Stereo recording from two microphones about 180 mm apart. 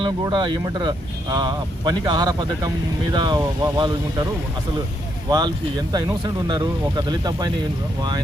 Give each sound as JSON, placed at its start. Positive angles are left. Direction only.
{"t": 0.0, "sound": "speech", "side_deg": -25}
{"t": 5.3, "sound": "speech", "side_deg": -25}